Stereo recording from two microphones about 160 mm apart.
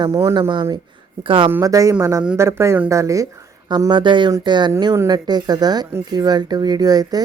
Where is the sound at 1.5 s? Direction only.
20° right (ahead or behind).